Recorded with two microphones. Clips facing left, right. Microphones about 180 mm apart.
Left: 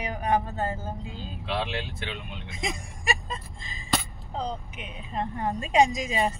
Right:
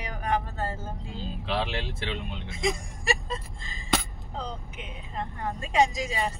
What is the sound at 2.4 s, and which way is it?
Speech, 20° left (ahead or behind).